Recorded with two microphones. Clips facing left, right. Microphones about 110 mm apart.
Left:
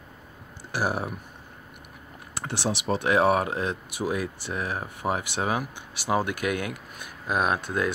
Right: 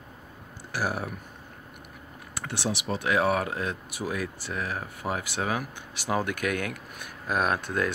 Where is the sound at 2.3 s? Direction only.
30° left (ahead or behind).